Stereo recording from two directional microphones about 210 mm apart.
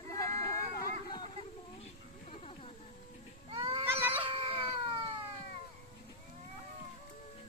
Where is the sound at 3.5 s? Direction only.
25° right (ahead or behind).